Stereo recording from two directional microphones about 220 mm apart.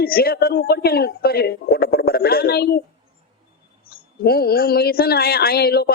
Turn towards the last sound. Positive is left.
turn(degrees=45)  # may be behind; listen again after turning